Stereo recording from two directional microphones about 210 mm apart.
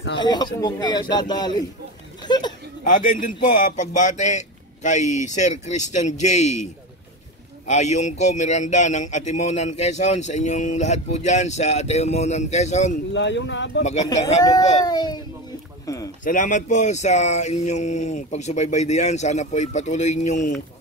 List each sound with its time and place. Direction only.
0.2 s speech: 20° left (ahead or behind)
2.2 s a sound: 20° left (ahead or behind)
2.8 s speech: 35° left (ahead or behind)
7.6 s speech: 35° left (ahead or behind)
13.1 s speech: 60° left (ahead or behind)
14.4 s a child's voice: 15° left (ahead or behind)
15.8 s a sound: 15° left (ahead or behind)
16.3 s speech: 40° left (ahead or behind)